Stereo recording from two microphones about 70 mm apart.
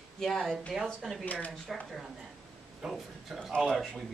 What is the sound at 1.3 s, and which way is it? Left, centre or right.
Speech, left.